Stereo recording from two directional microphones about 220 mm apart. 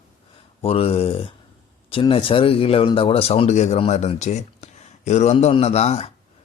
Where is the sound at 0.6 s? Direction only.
25° left (ahead or behind).